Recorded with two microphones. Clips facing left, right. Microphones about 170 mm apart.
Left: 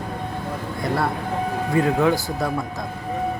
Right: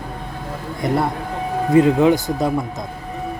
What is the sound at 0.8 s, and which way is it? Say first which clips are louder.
Speech: right 3 dB; 20° right (ahead or behind).